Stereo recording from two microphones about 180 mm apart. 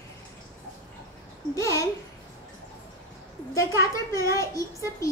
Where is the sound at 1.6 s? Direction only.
15° left (ahead or behind).